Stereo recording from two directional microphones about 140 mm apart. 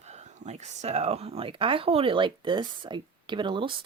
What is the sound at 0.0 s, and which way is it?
Speech, 55° right (ahead or behind).